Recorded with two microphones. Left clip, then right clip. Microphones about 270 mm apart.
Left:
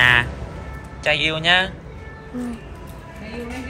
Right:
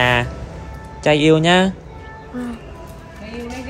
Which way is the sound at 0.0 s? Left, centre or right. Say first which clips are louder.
Left 2 dB; centre.